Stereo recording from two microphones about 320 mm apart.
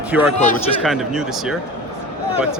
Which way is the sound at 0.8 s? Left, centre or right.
Centre.